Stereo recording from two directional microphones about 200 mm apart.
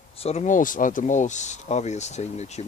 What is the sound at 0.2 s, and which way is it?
Speech, 30° left (ahead or behind).